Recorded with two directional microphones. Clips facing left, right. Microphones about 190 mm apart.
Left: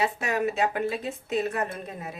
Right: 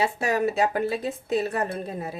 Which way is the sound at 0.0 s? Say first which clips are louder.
Right 3 dB; 35° right (ahead or behind).